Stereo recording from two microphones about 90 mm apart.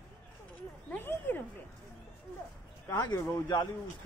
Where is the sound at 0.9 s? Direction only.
20° left (ahead or behind).